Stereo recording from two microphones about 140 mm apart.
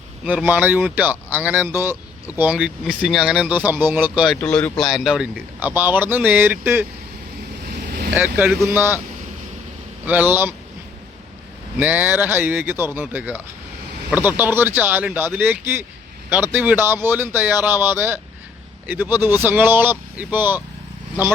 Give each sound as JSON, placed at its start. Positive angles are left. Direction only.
{"t": 0.3, "sound": "speech", "side_deg": -10}
{"t": 4.4, "sound": "speech", "side_deg": 10}
{"t": 7.8, "sound": "vehicle", "side_deg": -90}
{"t": 8.1, "sound": "speech", "side_deg": -10}
{"t": 10.1, "sound": "speech", "side_deg": -15}
{"t": 11.8, "sound": "speech", "side_deg": -10}